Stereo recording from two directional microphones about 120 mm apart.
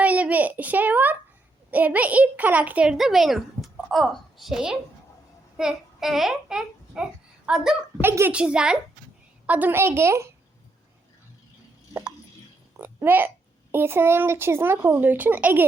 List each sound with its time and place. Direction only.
0.0 s a sound: 10° right (ahead or behind)
1.7 s a child's voice: 15° right (ahead or behind)
8.0 s a child's voice: 20° right (ahead or behind)
12.8 s a child's voice: 15° right (ahead or behind)